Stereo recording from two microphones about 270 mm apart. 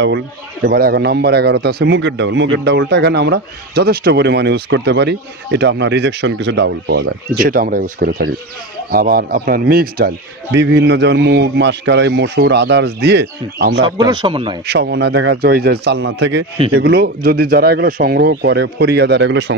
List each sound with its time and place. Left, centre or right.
0.7 s a man's voice: right
13.8 s speech: centre
14.7 s a man's voice: right